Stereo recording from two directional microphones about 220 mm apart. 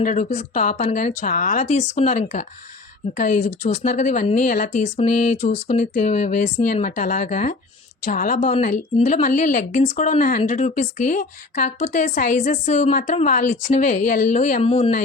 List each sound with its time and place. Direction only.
0.0 s a woman's voice: 35° left (ahead or behind)